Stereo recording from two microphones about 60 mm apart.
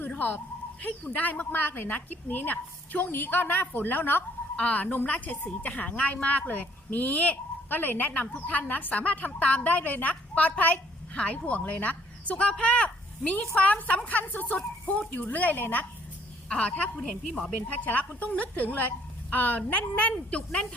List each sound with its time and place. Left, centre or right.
0.1 s speech: left
16.5 s speech: centre
17.0 s a woman's voice: centre
18.2 s speech: left
20.5 s a woman's voice: centre